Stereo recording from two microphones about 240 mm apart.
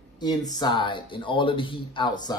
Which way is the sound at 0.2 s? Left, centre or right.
Centre.